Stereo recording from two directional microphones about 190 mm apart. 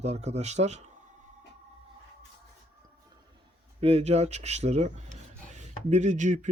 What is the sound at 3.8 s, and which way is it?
Speech, 35° right (ahead or behind).